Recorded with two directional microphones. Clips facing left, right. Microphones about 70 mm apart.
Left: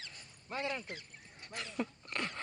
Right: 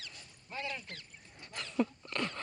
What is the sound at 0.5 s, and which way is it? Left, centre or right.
Speech, left.